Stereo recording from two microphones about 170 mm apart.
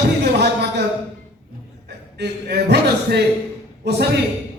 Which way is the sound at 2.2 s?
75° right (ahead or behind).